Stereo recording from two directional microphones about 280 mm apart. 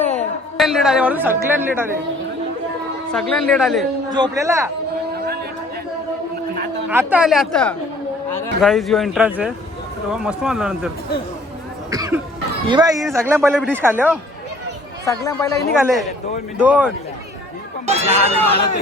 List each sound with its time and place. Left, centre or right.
0.2 s a woman's voice: centre
3.1 s speech: centre
4.1 s a man's voice: centre
6.9 s a man's voice: centre
13.0 s a man's voice: centre
15.0 s speech: centre
16.6 s speech: centre
17.8 s speech: right